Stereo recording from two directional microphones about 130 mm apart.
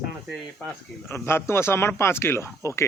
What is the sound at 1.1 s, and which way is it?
A man's voice, 20° left (ahead or behind).